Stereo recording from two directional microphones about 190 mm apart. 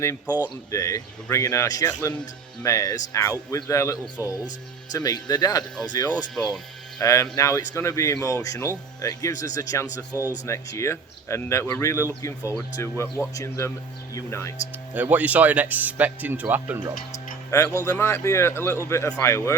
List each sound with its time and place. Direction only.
0.3 s speech: 10° right (ahead or behind)
0.7 s speech: 15° left (ahead or behind)
6.3 s speech: centre (ahead or behind)
7.0 s speech: 15° left (ahead or behind)
14.9 s speech: 10° right (ahead or behind)
17.7 s speech: 15° left (ahead or behind)